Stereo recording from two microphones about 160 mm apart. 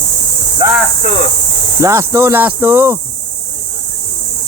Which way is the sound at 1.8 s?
20° right (ahead or behind).